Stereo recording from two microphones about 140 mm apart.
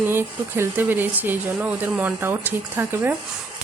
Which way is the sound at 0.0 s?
15° right (ahead or behind).